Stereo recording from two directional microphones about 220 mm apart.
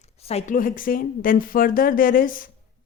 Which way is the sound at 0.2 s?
30° left (ahead or behind).